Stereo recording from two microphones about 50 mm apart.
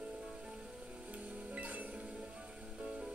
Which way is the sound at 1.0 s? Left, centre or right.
Right.